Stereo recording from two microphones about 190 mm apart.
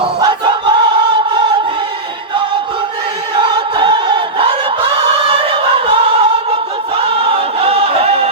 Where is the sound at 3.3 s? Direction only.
25° right (ahead or behind).